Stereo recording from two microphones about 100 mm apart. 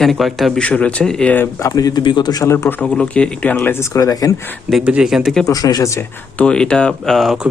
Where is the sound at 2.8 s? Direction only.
5° left (ahead or behind); by 4.4 s 35° left (ahead or behind).